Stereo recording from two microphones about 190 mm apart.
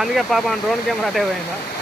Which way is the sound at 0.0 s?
Centre (ahead or behind).